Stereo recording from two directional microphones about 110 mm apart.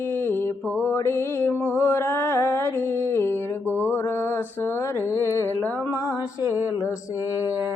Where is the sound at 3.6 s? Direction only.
15° right (ahead or behind).